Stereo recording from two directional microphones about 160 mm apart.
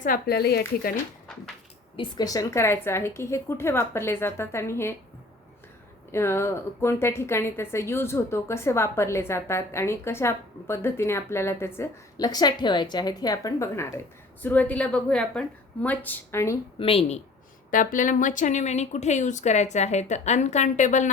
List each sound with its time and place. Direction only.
0.0 s speech: 70° left (ahead or behind)
2.0 s a woman's voice: 25° left (ahead or behind)
6.1 s a woman's voice: 15° left (ahead or behind)
16.7 s a woman's voice: 35° left (ahead or behind)
17.7 s speech: 55° left (ahead or behind)